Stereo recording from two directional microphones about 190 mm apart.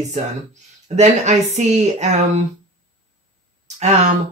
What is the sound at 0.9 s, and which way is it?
Speech, 35° right (ahead or behind).